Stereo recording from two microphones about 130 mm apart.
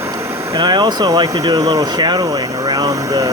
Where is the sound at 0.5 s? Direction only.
35° right (ahead or behind).